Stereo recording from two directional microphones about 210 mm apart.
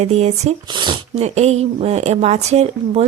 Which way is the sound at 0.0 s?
30° right (ahead or behind).